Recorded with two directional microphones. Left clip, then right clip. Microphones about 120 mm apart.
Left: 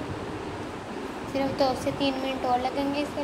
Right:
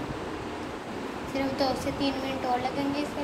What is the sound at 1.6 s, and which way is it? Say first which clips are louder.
Speech: left 3 dB; 25° left (ahead or behind).